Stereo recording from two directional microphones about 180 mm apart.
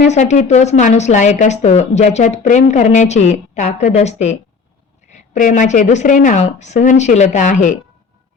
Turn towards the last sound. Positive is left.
turn(degrees=45)  # may be behind; listen again after turning